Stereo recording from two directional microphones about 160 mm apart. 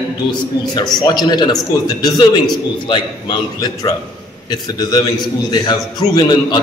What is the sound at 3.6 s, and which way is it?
A man's voice, 25° left (ahead or behind).